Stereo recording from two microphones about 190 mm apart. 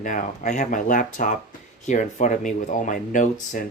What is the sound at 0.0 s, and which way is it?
Speech, 45° left (ahead or behind).